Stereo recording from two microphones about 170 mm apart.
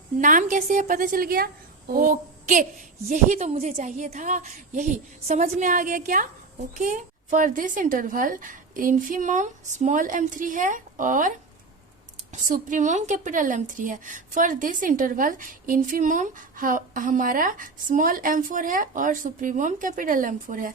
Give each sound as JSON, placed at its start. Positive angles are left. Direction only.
{"t": 0.2, "sound": "a woman's voice", "side_deg": -50}